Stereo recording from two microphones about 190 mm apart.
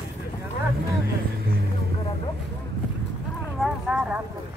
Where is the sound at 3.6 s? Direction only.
5° right (ahead or behind).